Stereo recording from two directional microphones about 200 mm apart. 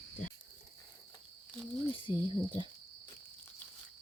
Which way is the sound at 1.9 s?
25° left (ahead or behind).